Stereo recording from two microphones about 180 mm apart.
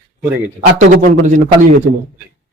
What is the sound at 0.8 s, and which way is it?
Speech, 45° right (ahead or behind).